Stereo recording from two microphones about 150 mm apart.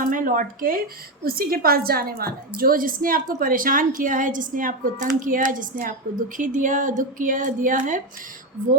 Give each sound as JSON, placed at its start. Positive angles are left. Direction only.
{"t": 0.0, "sound": "a woman's voice", "side_deg": -65}
{"t": 2.6, "sound": "a woman's voice", "side_deg": -70}